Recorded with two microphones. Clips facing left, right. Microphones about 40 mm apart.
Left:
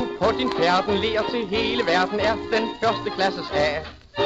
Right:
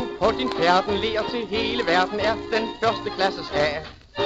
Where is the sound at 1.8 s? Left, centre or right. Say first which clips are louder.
Right 1 dB; centre.